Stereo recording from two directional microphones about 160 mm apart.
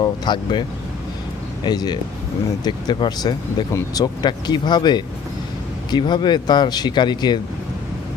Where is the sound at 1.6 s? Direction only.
25° left (ahead or behind).